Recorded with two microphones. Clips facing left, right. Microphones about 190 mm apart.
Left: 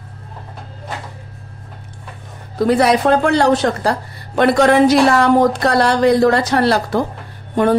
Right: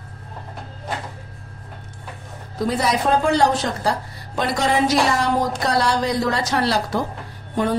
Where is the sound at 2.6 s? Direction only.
65° left (ahead or behind).